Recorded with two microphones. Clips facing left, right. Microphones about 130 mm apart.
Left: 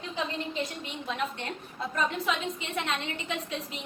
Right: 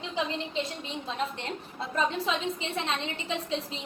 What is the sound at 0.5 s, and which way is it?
A woman's voice, 30° right (ahead or behind).